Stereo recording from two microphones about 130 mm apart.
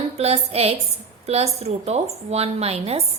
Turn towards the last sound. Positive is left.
turn(degrees=-50)  # may be behind; listen again after turning